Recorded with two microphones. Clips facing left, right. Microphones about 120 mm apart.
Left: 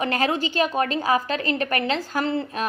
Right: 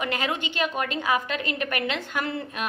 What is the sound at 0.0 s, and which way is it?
A woman's voice, 35° left (ahead or behind).